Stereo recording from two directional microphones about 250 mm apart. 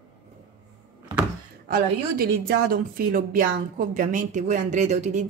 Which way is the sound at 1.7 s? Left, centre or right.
Right.